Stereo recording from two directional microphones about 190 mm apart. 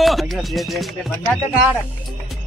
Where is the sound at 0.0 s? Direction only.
Centre (ahead or behind).